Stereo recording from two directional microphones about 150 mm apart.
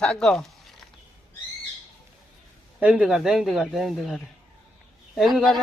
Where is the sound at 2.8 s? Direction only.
5° right (ahead or behind).